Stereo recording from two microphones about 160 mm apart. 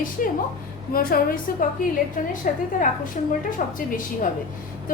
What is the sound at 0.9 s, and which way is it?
Speech, 65° left (ahead or behind).